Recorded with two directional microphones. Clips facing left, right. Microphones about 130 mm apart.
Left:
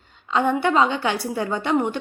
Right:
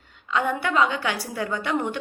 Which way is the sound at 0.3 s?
30° left (ahead or behind).